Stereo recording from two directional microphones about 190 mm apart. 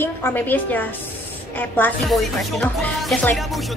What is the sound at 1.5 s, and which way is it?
Music, 10° left (ahead or behind).